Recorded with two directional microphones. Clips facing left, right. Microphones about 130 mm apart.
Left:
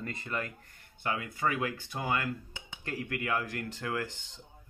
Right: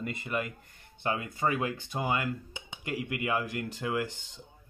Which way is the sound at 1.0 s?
25° right (ahead or behind).